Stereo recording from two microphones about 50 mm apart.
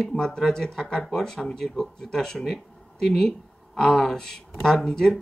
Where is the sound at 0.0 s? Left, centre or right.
Centre.